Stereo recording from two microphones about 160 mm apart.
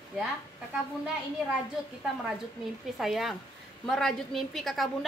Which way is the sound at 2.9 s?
Centre (ahead or behind).